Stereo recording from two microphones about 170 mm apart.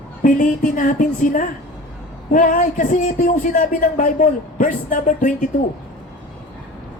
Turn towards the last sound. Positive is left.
turn(degrees=50)  # may be behind; listen again after turning